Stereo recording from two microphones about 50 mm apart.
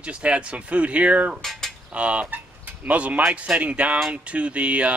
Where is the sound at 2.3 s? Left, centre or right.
Right.